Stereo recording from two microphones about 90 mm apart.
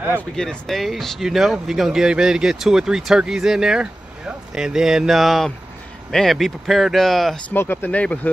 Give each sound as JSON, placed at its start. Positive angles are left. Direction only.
{"t": 0.4, "sound": "speech", "side_deg": 5}
{"t": 7.4, "sound": "speech", "side_deg": 25}